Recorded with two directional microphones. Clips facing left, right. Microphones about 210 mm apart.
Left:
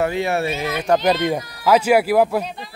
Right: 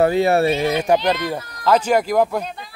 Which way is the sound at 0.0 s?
35° right (ahead or behind).